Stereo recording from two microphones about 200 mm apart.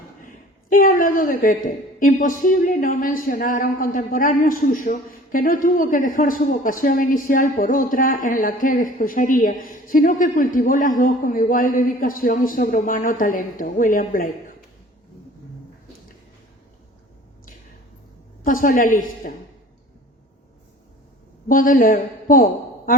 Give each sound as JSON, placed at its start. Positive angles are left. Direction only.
{"t": 0.2, "sound": "speech", "side_deg": 45}
{"t": 18.4, "sound": "a woman's voice", "side_deg": 45}
{"t": 21.4, "sound": "speech", "side_deg": 45}